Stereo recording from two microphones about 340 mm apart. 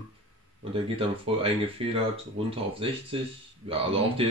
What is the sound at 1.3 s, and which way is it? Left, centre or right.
A man's voice, centre.